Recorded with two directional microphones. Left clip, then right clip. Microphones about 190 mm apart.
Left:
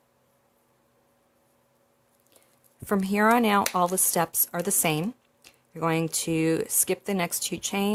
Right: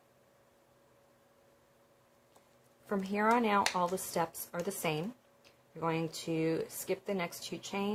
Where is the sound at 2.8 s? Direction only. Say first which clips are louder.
Left 8 dB; 60° left (ahead or behind).